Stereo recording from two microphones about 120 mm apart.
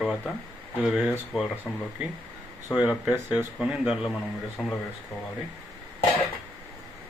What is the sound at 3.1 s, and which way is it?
Speech, 20° right (ahead or behind).